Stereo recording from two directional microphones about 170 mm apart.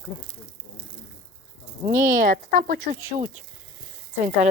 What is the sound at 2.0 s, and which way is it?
Speech, 50° right (ahead or behind).